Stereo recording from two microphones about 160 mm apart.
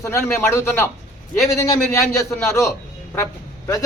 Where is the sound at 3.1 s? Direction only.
15° left (ahead or behind).